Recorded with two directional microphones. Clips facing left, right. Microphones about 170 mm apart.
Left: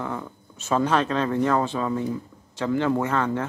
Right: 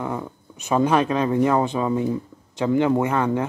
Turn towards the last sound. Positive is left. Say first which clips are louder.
# right 3 dB
turn(degrees=-15)  # may be behind; listen again after turning